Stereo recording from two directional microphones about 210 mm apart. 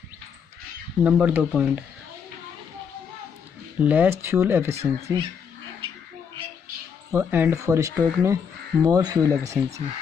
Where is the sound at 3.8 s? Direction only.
10° right (ahead or behind).